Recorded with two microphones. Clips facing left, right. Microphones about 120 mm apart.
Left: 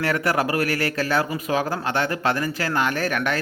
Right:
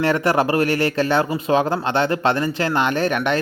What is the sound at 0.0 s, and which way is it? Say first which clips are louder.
A man's voice: right 4 dB; 25° right (ahead or behind).